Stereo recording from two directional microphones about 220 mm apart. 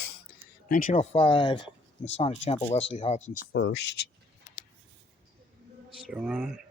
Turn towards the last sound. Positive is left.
turn(degrees=-5)  # may be behind; listen again after turning